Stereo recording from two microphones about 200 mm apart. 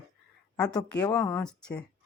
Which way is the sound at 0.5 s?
20° left (ahead or behind).